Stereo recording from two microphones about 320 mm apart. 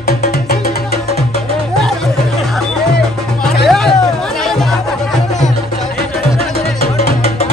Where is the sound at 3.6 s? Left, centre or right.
Centre.